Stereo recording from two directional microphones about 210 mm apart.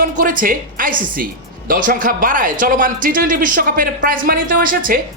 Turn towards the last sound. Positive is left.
turn(degrees=-40)  # may be behind; listen again after turning